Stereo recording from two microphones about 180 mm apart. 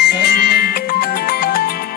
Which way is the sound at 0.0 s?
55° left (ahead or behind).